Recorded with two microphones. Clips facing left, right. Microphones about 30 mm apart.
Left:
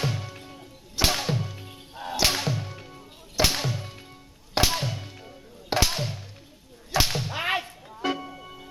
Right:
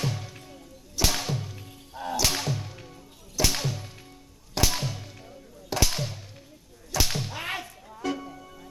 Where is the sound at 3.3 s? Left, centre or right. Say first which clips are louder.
Left 2 dB; left.